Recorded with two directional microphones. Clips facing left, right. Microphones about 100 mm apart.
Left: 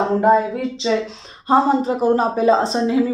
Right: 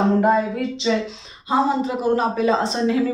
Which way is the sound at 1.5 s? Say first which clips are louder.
Left 4 dB; 40° left (ahead or behind).